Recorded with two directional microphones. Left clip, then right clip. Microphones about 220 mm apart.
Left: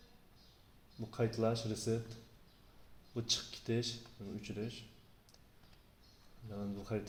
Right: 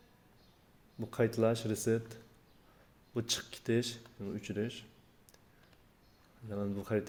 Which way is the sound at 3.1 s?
40° right (ahead or behind).